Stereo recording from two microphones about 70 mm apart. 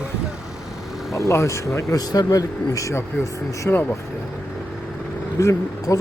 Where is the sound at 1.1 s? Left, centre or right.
Left.